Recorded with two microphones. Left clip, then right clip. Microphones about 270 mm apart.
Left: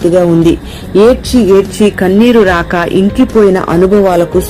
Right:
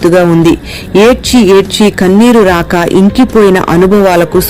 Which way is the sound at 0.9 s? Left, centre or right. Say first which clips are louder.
Right 1 dB; right.